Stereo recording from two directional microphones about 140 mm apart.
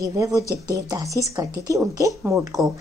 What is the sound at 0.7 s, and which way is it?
Speech, 25° right (ahead or behind).